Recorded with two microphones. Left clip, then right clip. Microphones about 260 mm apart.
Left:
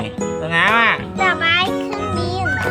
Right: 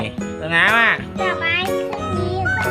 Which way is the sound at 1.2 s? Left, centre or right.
Left.